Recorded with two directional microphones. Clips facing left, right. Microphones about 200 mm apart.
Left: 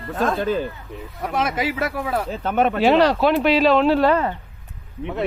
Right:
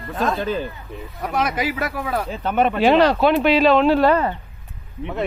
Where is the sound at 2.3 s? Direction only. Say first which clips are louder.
Right 1 dB; 45° left (ahead or behind).